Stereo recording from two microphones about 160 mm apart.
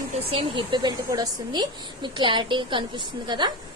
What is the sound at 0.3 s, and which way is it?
A woman's voice, 35° right (ahead or behind).